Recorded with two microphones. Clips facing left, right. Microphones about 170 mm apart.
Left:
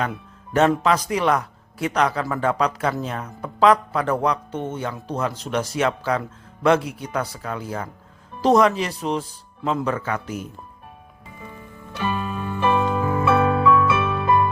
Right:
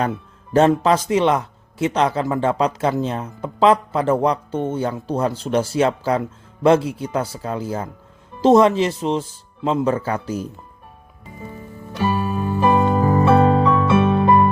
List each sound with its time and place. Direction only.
0.1 s a man's voice: 25° right (ahead or behind)
11.3 s music: 35° right (ahead or behind)